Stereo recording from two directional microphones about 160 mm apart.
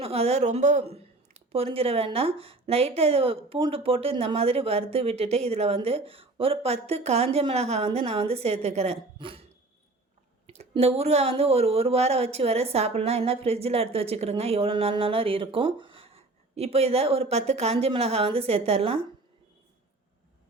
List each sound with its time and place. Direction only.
0.0 s speech: 40° right (ahead or behind)